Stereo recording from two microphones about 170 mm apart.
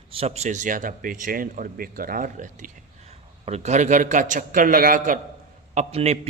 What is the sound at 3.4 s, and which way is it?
A man's voice, 40° right (ahead or behind).